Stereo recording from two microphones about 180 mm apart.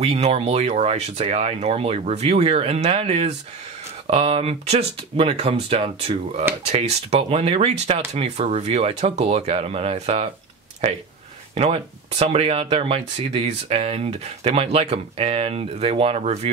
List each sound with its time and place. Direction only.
0.0 s speech: 35° right (ahead or behind)
11.5 s speech: 35° right (ahead or behind)